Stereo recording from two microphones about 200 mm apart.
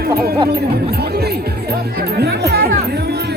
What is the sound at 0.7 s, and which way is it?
Music, 50° right (ahead or behind).